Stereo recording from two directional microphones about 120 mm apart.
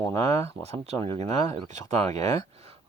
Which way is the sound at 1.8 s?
30° left (ahead or behind).